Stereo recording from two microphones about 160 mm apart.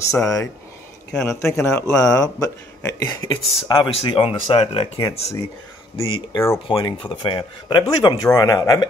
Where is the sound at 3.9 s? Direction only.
35° left (ahead or behind).